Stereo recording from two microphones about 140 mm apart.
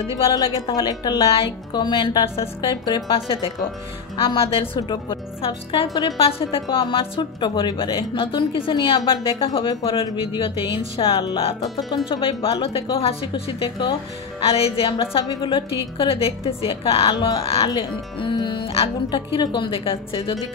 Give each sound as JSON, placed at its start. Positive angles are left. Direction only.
{"t": 0.7, "sound": "a woman's voice", "side_deg": 30}
{"t": 2.6, "sound": "speech", "side_deg": 30}
{"t": 3.1, "sound": "a woman's voice", "side_deg": 40}
{"t": 15.2, "sound": "a woman's voice", "side_deg": 30}
{"t": 17.6, "sound": "a woman's voice", "side_deg": 30}